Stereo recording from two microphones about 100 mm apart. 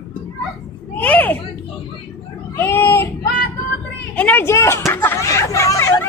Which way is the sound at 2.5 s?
25° left (ahead or behind).